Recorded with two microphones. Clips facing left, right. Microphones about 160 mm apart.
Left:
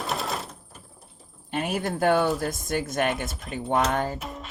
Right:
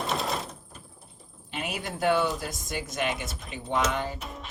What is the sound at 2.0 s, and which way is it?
Speech, 50° left (ahead or behind).